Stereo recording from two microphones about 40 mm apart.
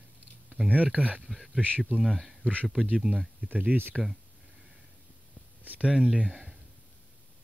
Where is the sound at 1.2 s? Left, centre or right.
Centre.